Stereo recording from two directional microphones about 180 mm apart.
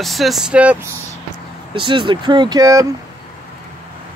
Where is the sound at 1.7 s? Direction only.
30° right (ahead or behind).